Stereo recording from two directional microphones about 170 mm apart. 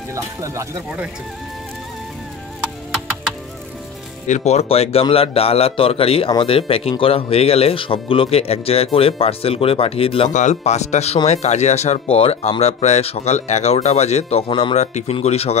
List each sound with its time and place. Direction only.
0.1 s speech: 15° right (ahead or behind)
4.3 s a man's voice: 40° left (ahead or behind)